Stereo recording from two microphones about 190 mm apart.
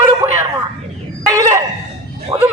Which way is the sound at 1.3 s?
15° right (ahead or behind).